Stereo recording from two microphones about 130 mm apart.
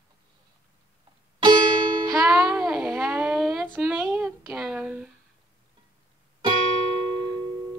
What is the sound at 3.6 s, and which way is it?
Female singing, 15° right (ahead or behind).